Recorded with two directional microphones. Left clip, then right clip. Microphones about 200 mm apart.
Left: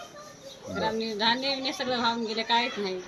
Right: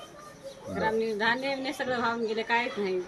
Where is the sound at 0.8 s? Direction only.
5° right (ahead or behind).